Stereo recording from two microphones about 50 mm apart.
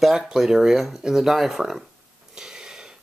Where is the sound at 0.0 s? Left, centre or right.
Centre.